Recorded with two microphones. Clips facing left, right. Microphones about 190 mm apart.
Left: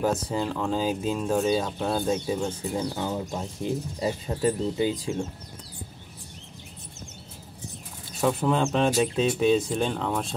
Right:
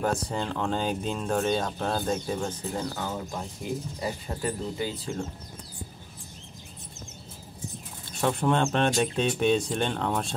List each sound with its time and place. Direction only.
0.0 s speech: 5° left (ahead or behind)
8.2 s speech: 5° left (ahead or behind)